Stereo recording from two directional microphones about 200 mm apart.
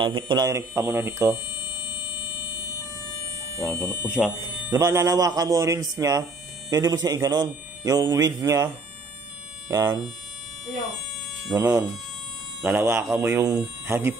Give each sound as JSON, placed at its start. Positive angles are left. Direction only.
{"t": 0.0, "sound": "a man's voice", "side_deg": -20}
{"t": 1.8, "sound": "buzzer", "side_deg": 25}
{"t": 3.6, "sound": "speech", "side_deg": 5}
{"t": 4.7, "sound": "a man's voice", "side_deg": -15}
{"t": 9.7, "sound": "speech", "side_deg": -15}
{"t": 11.5, "sound": "a man's voice", "side_deg": -10}